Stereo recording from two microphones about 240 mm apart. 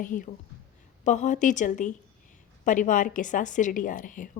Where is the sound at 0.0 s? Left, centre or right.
Left.